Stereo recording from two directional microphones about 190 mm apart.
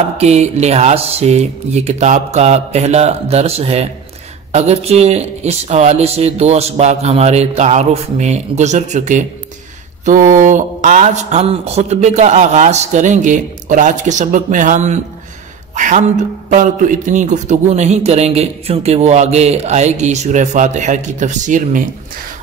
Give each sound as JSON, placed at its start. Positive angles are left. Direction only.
{"t": 0.2, "sound": "a man's voice", "side_deg": -35}